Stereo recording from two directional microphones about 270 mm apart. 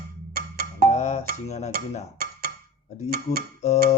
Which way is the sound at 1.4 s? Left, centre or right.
Left.